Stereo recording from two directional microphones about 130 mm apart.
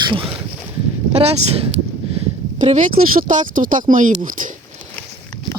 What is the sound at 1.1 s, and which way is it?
Speech, 50° right (ahead or behind).